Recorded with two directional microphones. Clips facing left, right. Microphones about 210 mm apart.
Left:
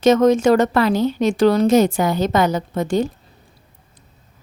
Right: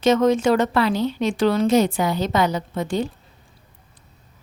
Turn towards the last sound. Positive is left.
turn(degrees=45)  # may be behind; listen again after turning